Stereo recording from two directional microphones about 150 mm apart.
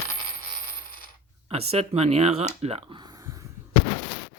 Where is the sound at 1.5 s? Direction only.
45° right (ahead or behind).